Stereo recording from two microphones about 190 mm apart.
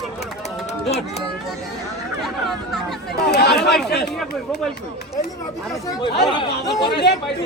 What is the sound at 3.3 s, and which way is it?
Speech, 60° left (ahead or behind).